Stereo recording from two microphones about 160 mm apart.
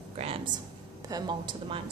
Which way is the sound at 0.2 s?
40° right (ahead or behind).